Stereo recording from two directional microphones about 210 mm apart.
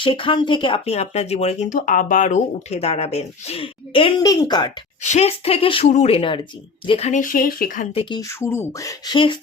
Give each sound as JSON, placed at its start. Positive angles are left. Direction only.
{"t": 0.0, "sound": "speech", "side_deg": 25}
{"t": 5.0, "sound": "speech", "side_deg": 30}
{"t": 7.9, "sound": "speech", "side_deg": 20}